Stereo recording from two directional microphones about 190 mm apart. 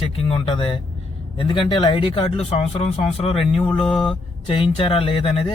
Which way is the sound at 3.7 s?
Centre (ahead or behind).